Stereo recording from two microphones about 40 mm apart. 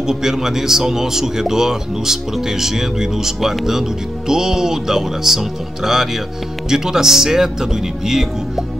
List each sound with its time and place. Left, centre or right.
0.0 s speech: centre